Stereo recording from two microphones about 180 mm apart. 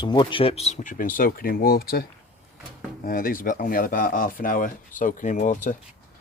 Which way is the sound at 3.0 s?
55° left (ahead or behind).